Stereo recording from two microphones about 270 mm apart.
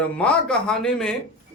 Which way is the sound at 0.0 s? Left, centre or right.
Centre.